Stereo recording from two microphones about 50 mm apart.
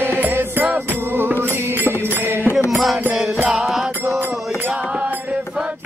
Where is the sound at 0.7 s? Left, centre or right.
Right.